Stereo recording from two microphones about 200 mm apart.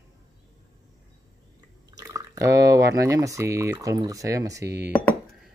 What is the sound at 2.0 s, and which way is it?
Speech, 15° right (ahead or behind).